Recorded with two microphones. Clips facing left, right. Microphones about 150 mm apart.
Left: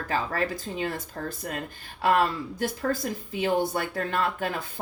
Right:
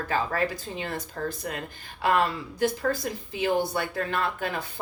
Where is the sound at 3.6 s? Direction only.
45° left (ahead or behind).